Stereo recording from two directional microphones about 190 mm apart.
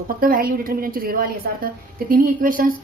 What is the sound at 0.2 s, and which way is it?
A woman's voice, 50° right (ahead or behind).